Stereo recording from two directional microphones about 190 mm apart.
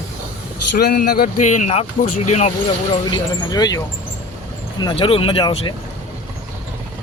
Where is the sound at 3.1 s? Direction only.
20° left (ahead or behind).